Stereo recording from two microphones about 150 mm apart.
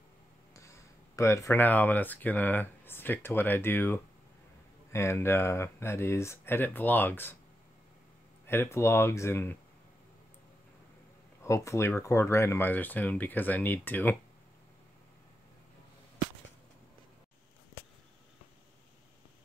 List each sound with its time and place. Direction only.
0.6 s speech: 20° left (ahead or behind)
8.5 s speech: 15° left (ahead or behind)
11.4 s speech: 20° left (ahead or behind)